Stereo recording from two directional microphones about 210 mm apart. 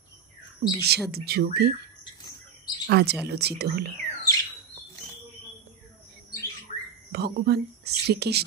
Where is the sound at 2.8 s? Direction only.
50° right (ahead or behind).